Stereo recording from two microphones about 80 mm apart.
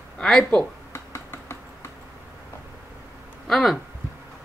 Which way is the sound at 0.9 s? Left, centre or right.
Left.